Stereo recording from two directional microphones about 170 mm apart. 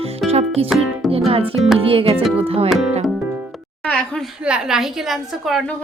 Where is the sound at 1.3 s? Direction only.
35° right (ahead or behind).